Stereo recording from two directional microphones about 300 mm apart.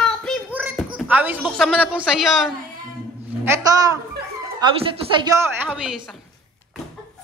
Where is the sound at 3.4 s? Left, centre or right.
Centre.